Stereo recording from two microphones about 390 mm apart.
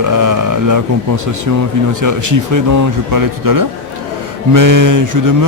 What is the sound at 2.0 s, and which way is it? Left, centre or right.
Mantra, right.